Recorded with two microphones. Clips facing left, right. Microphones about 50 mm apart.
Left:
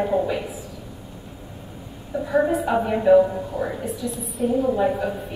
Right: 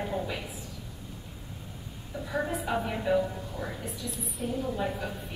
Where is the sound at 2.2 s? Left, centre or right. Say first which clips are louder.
Left 10 dB; centre.